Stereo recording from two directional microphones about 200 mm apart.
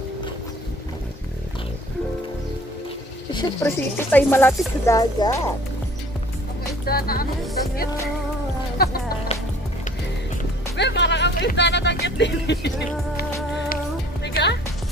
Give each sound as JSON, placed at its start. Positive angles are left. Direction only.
{"t": 3.3, "sound": "speech", "side_deg": 10}
{"t": 6.9, "sound": "music", "side_deg": 50}
{"t": 8.8, "sound": "music", "side_deg": 50}
{"t": 10.8, "sound": "music", "side_deg": 60}
{"t": 14.2, "sound": "music", "side_deg": 60}